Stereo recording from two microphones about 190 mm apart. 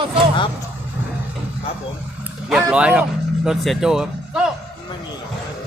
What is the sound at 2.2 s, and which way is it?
Speech, 5° right (ahead or behind).